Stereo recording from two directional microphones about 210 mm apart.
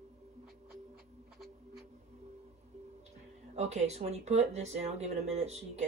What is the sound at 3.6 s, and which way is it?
Speech, 30° right (ahead or behind).